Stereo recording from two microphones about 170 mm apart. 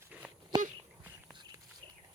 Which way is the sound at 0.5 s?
25° right (ahead or behind).